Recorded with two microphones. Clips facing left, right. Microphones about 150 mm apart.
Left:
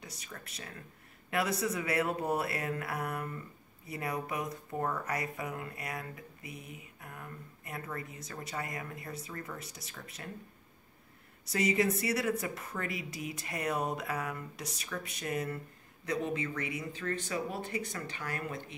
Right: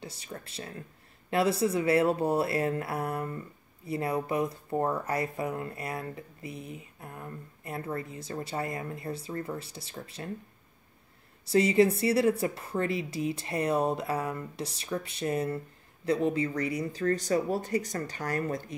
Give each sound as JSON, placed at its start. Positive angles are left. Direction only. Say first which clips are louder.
{"t": 0.0, "sound": "speech", "louder": "right 6 dB", "side_deg": -30}
{"t": 11.4, "sound": "speech", "louder": "right 7 dB", "side_deg": -30}